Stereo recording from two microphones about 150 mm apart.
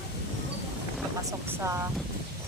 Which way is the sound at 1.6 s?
20° right (ahead or behind).